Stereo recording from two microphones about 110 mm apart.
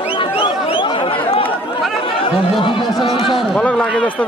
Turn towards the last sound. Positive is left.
turn(degrees=10)  # may be behind; listen again after turning